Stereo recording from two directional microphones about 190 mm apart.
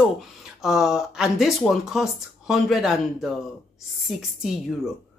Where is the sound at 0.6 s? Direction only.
Centre (ahead or behind).